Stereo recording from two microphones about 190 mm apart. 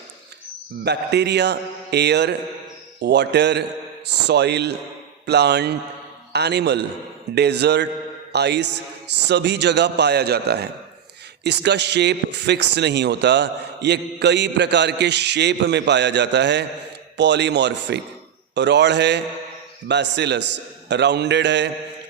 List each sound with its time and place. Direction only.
0.9 s a man's voice: 60° right (ahead or behind)